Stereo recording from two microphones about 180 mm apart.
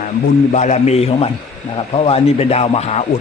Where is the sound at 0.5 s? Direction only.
40° left (ahead or behind).